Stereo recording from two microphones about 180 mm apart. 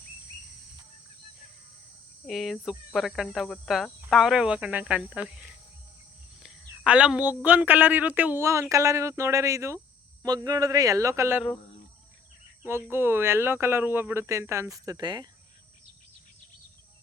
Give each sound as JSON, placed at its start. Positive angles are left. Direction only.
{"t": 2.2, "sound": "speech", "side_deg": 0}
{"t": 12.6, "sound": "speech", "side_deg": -10}